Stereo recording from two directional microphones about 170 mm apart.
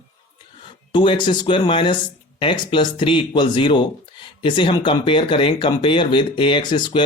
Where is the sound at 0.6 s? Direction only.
30° left (ahead or behind).